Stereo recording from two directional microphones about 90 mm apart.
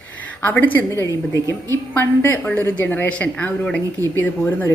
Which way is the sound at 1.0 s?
35° left (ahead or behind).